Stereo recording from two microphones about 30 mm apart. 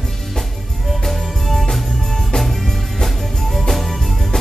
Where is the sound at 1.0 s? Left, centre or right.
Centre.